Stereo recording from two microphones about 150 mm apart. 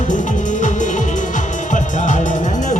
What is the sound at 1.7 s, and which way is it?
Music, 55° left (ahead or behind).